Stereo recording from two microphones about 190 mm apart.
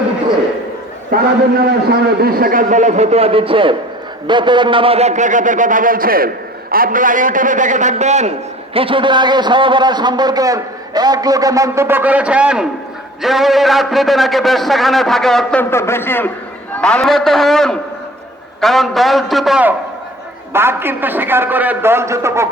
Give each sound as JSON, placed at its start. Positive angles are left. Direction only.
{"t": 1.1, "sound": "a man's voice", "side_deg": -50}